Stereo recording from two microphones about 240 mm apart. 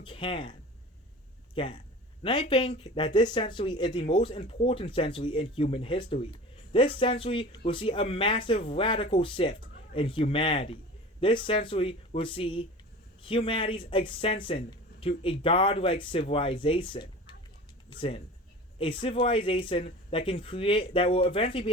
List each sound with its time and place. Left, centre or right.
0.0 s speech: left
1.5 s speech: left